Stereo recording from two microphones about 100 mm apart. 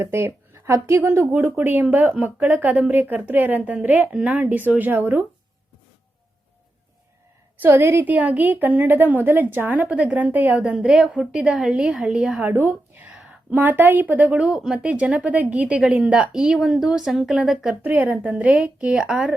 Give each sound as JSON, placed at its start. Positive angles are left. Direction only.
{"t": 0.0, "sound": "a woman's voice", "side_deg": -25}
{"t": 7.6, "sound": "a woman's voice", "side_deg": -25}
{"t": 14.4, "sound": "a woman's voice", "side_deg": -5}
{"t": 17.8, "sound": "a woman's voice", "side_deg": -15}